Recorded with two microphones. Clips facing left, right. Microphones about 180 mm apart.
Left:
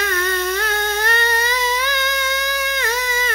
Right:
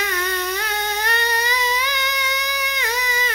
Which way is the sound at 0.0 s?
15° right (ahead or behind).